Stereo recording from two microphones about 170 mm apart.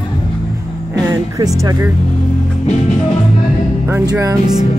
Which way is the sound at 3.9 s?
15° right (ahead or behind).